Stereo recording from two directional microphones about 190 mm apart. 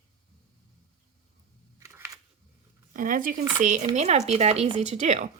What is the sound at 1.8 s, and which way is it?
Camera, 15° right (ahead or behind).